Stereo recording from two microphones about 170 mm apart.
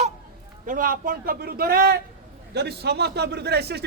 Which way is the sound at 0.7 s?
55° right (ahead or behind).